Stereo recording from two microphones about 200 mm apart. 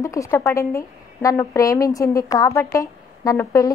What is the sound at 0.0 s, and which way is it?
A woman's voice, 15° left (ahead or behind).